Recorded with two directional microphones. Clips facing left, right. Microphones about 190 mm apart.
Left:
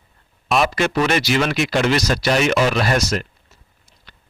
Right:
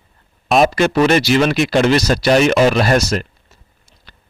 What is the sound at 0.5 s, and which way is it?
Speech, 40° right (ahead or behind).